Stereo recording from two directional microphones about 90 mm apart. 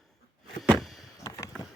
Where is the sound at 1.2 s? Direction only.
35° left (ahead or behind).